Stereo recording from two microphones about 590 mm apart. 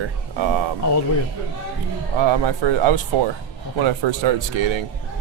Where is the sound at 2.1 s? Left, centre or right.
Right.